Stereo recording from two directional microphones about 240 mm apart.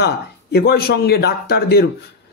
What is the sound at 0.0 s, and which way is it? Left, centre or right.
Speech, left.